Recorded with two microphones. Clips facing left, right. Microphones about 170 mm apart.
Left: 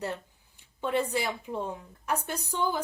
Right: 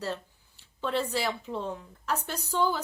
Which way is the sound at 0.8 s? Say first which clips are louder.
Left 1 dB; 15° left (ahead or behind).